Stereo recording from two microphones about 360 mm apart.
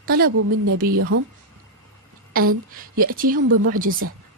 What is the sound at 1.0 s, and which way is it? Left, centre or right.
Speech, right.